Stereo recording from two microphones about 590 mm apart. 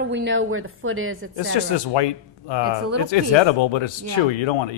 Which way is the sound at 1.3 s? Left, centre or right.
Left.